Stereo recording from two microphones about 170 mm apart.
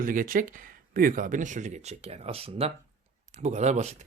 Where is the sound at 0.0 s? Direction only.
55° right (ahead or behind).